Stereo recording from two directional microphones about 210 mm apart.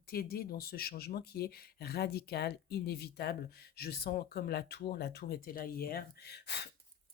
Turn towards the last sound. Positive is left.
turn(degrees=50)  # may be behind; listen again after turning